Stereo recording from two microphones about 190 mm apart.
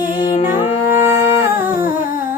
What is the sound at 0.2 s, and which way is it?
Music, 25° left (ahead or behind).